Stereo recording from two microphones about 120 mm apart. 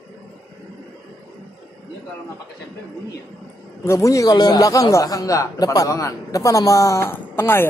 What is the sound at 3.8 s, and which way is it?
A man's voice, 25° left (ahead or behind).